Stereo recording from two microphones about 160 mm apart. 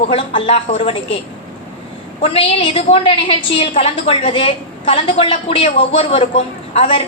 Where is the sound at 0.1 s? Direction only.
35° left (ahead or behind).